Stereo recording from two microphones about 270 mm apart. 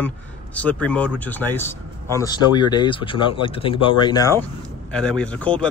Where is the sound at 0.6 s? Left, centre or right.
Centre.